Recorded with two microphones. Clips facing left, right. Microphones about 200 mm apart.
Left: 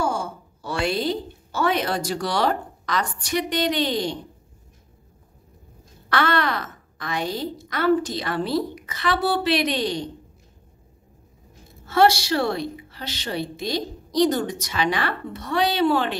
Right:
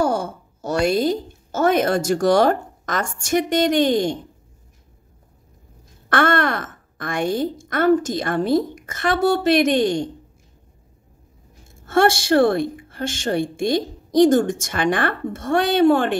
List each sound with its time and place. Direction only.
0.1 s a sound: 60° right (ahead or behind)
0.7 s speech: 45° right (ahead or behind)
6.0 s a woman's voice: 50° right (ahead or behind)
11.6 s a woman's voice: 50° right (ahead or behind)